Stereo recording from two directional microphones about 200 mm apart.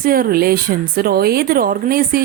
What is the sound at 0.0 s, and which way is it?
Speech, 45° right (ahead or behind).